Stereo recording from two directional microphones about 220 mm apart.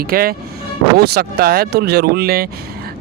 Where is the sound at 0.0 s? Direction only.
40° right (ahead or behind).